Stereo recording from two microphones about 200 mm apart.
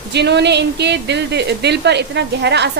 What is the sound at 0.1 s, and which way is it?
A woman's voice, 60° right (ahead or behind).